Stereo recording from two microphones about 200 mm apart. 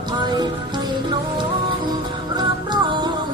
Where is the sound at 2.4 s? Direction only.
20° right (ahead or behind).